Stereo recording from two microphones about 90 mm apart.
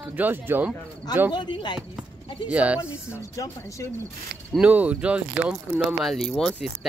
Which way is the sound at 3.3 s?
40° left (ahead or behind).